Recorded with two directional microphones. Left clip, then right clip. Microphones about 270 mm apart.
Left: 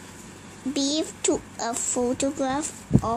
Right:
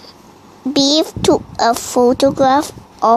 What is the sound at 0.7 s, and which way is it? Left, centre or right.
A woman's voice, right.